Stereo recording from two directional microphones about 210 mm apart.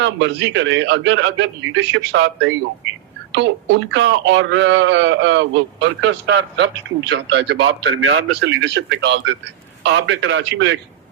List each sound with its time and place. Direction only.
0.0 s speech: 60° right (ahead or behind)